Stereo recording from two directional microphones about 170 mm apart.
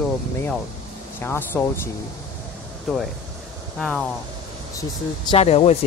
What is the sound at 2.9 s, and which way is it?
Speech, centre (ahead or behind).